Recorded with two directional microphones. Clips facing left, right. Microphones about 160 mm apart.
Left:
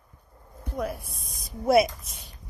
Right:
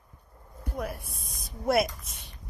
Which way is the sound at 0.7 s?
Centre (ahead or behind).